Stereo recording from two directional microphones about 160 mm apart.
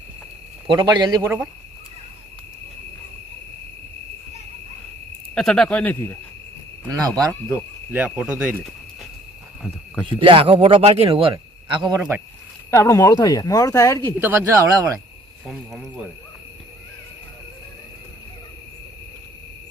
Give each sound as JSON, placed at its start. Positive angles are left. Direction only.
{"t": 0.7, "sound": "speech", "side_deg": -30}
{"t": 1.2, "sound": "speech", "side_deg": -15}
{"t": 5.3, "sound": "speech", "side_deg": 5}
{"t": 6.8, "sound": "speech", "side_deg": -20}
{"t": 7.5, "sound": "speech", "side_deg": -10}
{"t": 10.1, "sound": "a man's voice", "side_deg": -35}
{"t": 11.9, "sound": "speech", "side_deg": -10}
{"t": 12.7, "sound": "speech", "side_deg": 20}
{"t": 14.2, "sound": "speech", "side_deg": -15}
{"t": 15.4, "sound": "speech", "side_deg": 0}